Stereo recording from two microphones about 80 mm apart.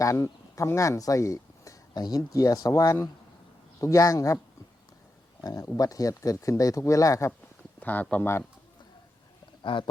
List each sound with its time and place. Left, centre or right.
0.0 s speech: left
1.9 s speech: left
5.4 s speech: left
7.8 s speech: left
9.7 s speech: left